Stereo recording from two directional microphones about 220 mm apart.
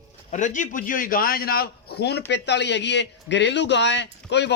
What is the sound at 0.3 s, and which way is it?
A man's voice, 35° left (ahead or behind).